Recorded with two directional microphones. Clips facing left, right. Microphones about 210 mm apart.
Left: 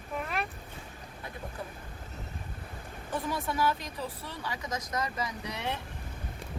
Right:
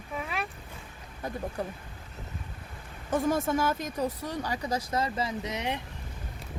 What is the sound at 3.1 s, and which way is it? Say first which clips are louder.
Speech: right 7 dB; 45° right (ahead or behind).